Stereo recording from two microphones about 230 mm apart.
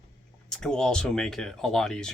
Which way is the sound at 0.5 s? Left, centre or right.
Centre.